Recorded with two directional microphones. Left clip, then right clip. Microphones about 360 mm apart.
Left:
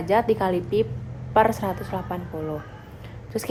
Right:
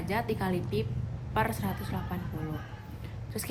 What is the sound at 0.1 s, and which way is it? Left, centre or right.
A woman's voice, centre.